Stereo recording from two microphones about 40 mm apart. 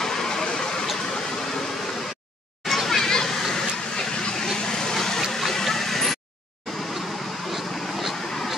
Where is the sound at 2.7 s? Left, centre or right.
Centre.